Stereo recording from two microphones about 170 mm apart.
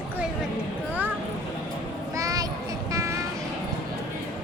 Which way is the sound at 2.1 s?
20° right (ahead or behind).